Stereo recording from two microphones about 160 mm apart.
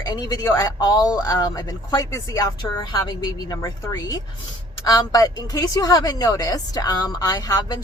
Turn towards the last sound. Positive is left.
turn(degrees=25)  # may be behind; listen again after turning